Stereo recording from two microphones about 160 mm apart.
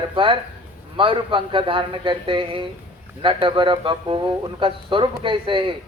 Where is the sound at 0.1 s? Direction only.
30° right (ahead or behind).